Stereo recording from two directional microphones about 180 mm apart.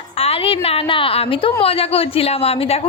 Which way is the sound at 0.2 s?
30° left (ahead or behind).